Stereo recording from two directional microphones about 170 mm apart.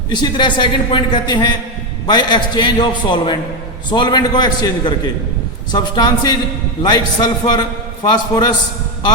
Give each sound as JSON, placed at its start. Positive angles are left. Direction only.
{"t": 0.1, "sound": "speech", "side_deg": 25}